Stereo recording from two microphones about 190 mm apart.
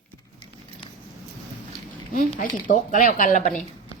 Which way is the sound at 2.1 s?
45° left (ahead or behind).